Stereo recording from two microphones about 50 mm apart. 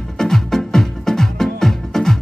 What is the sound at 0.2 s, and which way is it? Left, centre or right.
Music, centre.